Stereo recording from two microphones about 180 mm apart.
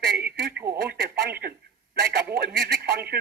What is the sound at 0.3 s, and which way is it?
Radio, 60° right (ahead or behind).